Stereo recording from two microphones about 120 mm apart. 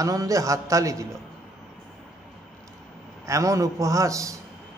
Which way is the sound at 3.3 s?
25° right (ahead or behind).